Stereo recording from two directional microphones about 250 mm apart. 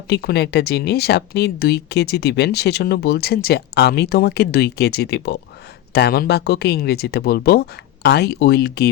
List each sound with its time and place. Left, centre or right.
0.1 s speech: left